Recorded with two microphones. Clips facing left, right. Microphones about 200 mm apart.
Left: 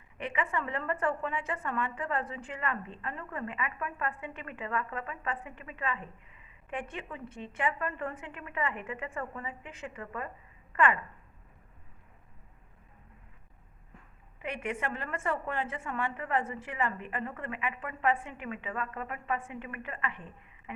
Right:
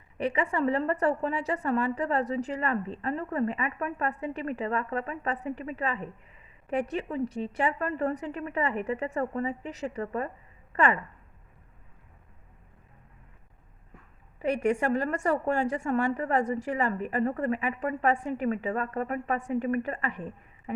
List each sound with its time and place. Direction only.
0.2 s a woman's voice: 35° right (ahead or behind)
14.4 s a woman's voice: 40° right (ahead or behind)